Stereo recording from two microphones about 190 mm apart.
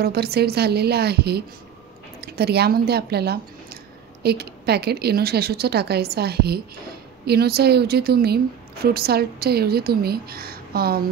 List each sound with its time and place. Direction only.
0.0 s a woman's voice: 55° right (ahead or behind)